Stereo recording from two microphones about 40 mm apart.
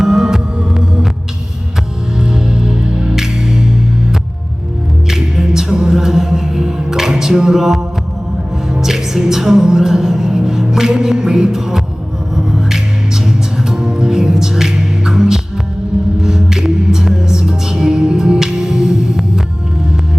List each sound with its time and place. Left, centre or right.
0.0 s music: centre
2.3 s music: centre
5.0 s music: centre